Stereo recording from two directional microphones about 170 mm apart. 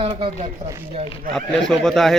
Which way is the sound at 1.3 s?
5° left (ahead or behind).